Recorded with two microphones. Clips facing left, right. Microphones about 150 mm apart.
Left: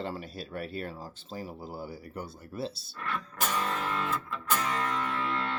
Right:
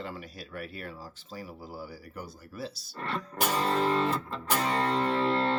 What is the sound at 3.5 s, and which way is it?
Music, 35° right (ahead or behind).